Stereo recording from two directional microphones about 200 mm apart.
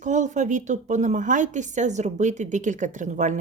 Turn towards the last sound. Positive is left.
turn(degrees=-40)  # may be behind; listen again after turning